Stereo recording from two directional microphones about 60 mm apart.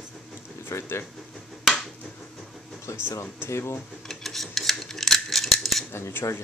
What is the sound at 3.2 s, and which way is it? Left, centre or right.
Speech, left.